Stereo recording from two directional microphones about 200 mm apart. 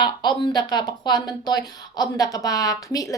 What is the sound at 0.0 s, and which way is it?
Speech, 20° left (ahead or behind).